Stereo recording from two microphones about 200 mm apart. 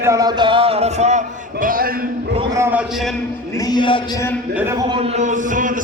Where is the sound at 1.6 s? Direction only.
45° right (ahead or behind).